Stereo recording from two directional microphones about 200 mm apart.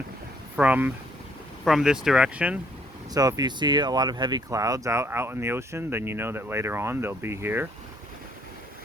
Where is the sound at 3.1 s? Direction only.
15° right (ahead or behind).